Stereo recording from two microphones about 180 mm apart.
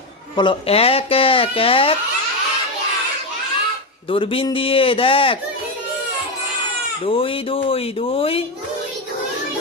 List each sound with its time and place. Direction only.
0.3 s speech: 30° left (ahead or behind)
4.1 s speech: 30° left (ahead or behind)
7.0 s speech: 30° left (ahead or behind)